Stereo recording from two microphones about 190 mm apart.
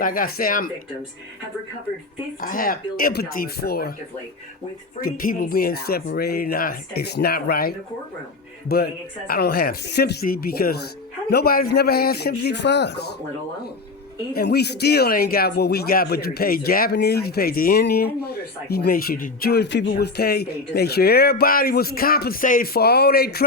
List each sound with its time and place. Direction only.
0.0 s speech: 50° left (ahead or behind)
2.4 s speech: 50° left (ahead or behind)
4.9 s speech: 50° left (ahead or behind)
8.7 s speech: 55° left (ahead or behind)
14.3 s speech: 60° left (ahead or behind)